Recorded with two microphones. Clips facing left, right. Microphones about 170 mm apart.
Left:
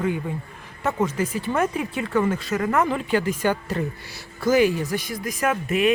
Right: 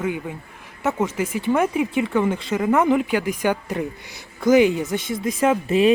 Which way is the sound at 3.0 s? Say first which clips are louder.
Right 1 dB; 10° right (ahead or behind).